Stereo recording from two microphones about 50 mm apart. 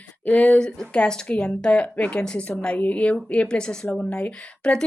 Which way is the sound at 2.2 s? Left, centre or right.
Centre.